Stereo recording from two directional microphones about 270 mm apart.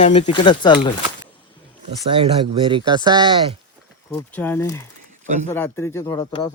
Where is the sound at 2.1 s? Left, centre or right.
Centre.